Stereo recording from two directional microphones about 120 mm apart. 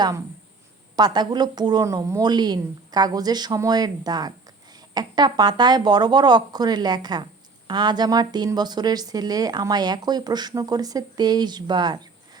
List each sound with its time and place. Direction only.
0.9 s a woman's voice: 35° right (ahead or behind)